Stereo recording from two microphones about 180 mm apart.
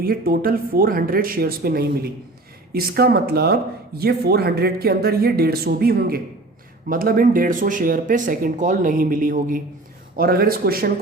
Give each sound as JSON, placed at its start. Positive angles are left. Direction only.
{"t": 0.0, "sound": "speech", "side_deg": -55}